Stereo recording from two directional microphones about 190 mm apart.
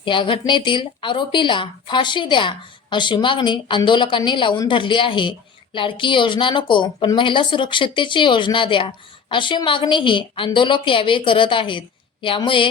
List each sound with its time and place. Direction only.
0.0 s speech: 25° left (ahead or behind)